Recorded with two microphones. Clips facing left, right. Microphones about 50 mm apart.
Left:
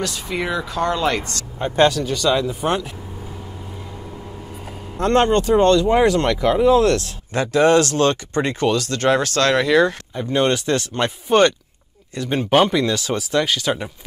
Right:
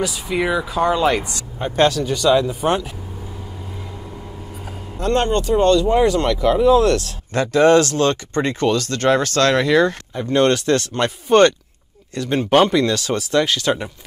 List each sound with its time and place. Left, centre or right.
0.0 s speech: centre
4.9 s speech: left
6.0 s speech: left
6.4 s speech: centre